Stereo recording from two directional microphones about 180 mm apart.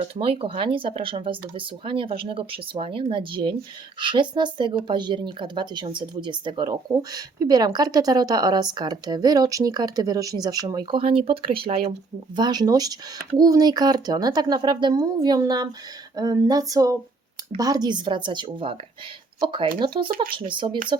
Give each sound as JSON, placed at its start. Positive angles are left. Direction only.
{"t": 0.0, "sound": "a woman's voice", "side_deg": -30}